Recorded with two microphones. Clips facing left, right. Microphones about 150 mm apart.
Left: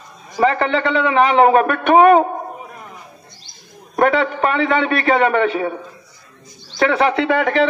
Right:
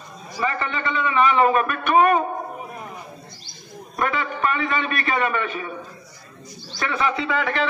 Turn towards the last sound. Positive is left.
turn(degrees=70)  # may be behind; listen again after turning